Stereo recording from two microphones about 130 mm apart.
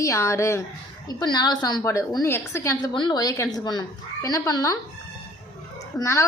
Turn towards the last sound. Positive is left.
turn(degrees=20)  # may be behind; listen again after turning